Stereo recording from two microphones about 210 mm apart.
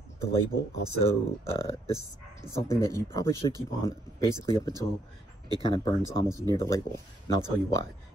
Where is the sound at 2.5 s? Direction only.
15° left (ahead or behind).